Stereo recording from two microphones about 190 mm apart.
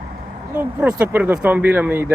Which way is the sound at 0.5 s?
10° right (ahead or behind).